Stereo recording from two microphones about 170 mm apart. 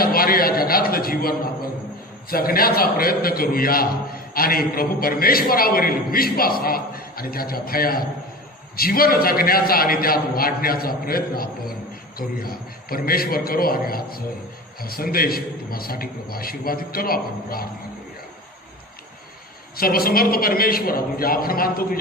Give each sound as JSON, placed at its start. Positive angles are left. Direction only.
{"t": 0.0, "sound": "a sound", "side_deg": 60}
{"t": 2.3, "sound": "a man's voice", "side_deg": 60}
{"t": 19.7, "sound": "a man's voice", "side_deg": 60}